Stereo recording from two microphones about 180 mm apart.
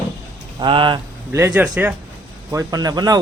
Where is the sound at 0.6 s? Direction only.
25° right (ahead or behind).